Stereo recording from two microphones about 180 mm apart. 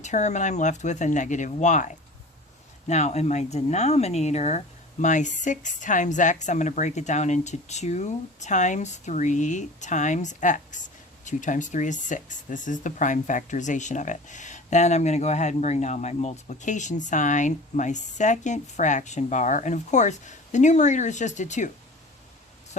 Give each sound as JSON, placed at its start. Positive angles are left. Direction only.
{"t": 0.0, "sound": "speech", "side_deg": 40}